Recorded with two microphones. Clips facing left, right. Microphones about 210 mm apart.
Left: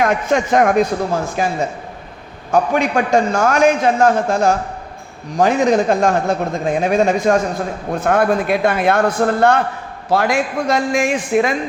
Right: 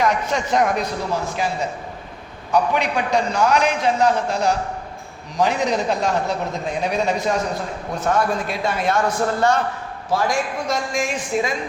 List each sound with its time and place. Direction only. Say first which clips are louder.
0.0 s a man's voice: left 5 dB; 50° left (ahead or behind)